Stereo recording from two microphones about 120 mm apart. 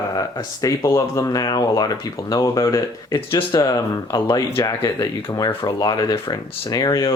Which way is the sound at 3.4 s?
45° left (ahead or behind).